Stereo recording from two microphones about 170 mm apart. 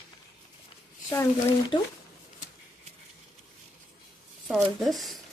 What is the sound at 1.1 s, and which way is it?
Speech, 15° left (ahead or behind).